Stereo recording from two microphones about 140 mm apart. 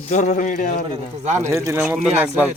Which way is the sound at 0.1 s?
60° left (ahead or behind).